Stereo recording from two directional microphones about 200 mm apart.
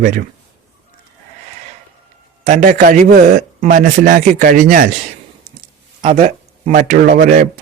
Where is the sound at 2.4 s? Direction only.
35° right (ahead or behind).